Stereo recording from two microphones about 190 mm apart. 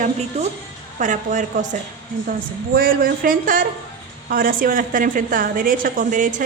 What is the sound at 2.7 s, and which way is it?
A woman's voice, 50° right (ahead or behind).